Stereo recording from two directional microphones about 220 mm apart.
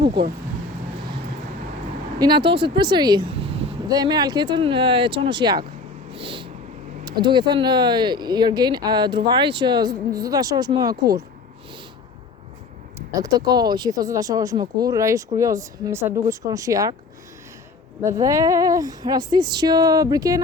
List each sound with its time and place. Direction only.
2.1 s speech: 20° right (ahead or behind)
6.1 s a sound: 25° right (ahead or behind)
7.0 s speech: 20° right (ahead or behind)
13.1 s speech: 15° right (ahead or behind)
18.0 s speech: 15° right (ahead or behind)